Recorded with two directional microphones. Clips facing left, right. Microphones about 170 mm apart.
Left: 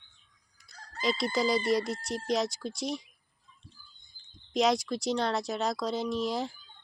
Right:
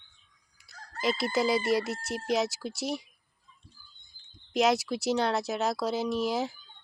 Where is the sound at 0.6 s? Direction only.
5° right (ahead or behind).